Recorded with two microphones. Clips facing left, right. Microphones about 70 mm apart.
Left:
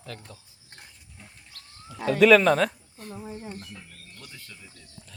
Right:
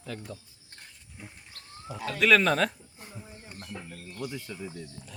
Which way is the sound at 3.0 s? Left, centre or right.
Centre.